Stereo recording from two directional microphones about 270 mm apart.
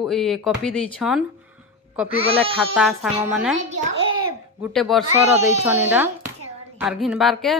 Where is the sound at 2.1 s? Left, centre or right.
Right.